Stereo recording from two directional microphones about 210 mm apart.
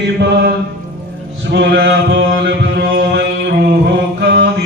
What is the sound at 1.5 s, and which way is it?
Mantra, 55° right (ahead or behind).